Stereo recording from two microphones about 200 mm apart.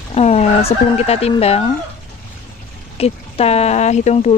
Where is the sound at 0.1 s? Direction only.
30° left (ahead or behind).